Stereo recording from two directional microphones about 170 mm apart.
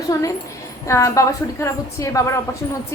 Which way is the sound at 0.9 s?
20° left (ahead or behind).